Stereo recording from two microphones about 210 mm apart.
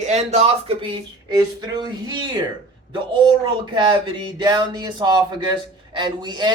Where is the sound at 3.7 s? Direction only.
20° right (ahead or behind).